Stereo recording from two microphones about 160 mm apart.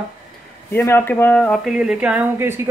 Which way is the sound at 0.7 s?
15° left (ahead or behind).